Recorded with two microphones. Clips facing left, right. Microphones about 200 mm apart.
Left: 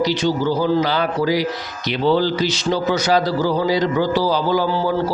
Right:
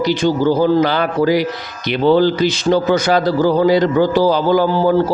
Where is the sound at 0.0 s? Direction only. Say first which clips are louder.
Right 4 dB; 55° right (ahead or behind).